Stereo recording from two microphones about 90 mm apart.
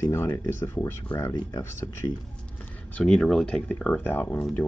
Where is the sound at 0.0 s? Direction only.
25° left (ahead or behind).